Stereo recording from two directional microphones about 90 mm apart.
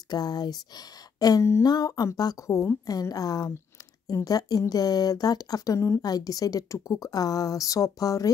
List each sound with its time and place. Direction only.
0.1 s a woman's voice: 50° left (ahead or behind)